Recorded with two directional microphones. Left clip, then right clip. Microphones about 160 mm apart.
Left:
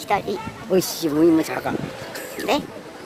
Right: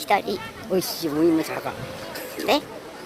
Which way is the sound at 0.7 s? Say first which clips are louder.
Left 4 dB; 45° left (ahead or behind).